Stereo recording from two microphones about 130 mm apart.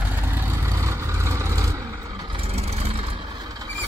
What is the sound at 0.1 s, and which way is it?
Vehicle, 15° right (ahead or behind).